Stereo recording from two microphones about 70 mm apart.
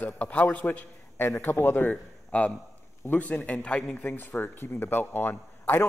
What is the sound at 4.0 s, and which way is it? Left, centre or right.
Speech, left.